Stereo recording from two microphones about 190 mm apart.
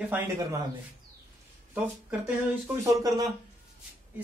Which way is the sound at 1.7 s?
10° right (ahead or behind).